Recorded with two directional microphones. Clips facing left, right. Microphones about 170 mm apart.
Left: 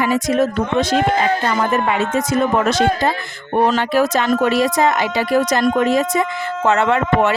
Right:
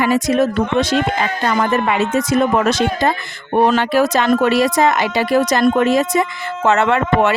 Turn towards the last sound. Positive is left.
turn(degrees=-80)